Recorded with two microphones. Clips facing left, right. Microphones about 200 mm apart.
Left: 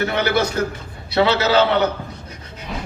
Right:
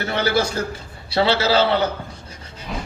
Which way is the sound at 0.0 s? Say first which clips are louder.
Left 2 dB; 30° right (ahead or behind).